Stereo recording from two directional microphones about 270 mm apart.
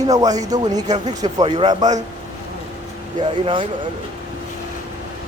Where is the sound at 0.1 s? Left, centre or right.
Centre.